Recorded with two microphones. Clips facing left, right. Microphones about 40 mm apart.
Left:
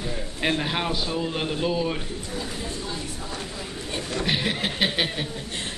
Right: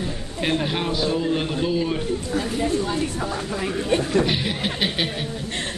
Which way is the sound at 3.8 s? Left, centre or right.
Right.